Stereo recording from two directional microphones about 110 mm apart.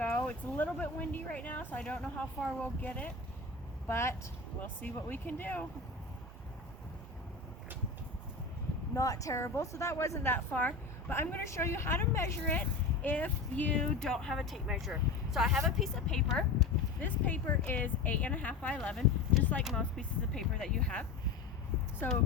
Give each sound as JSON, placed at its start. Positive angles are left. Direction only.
{"t": 0.3, "sound": "a woman's voice", "side_deg": 15}
{"t": 9.0, "sound": "a woman's voice", "side_deg": 30}
{"t": 17.0, "sound": "a woman's voice", "side_deg": 15}